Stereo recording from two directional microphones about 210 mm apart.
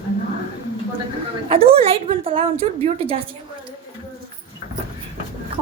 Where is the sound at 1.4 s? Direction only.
25° right (ahead or behind).